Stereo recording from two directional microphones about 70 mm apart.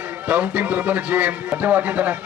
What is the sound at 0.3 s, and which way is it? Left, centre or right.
A man's voice, right.